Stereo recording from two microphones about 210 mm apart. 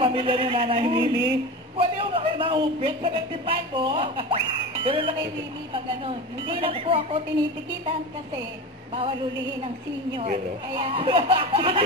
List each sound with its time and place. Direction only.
0.0 s speech: 25° right (ahead or behind)
10.7 s speech: 25° right (ahead or behind)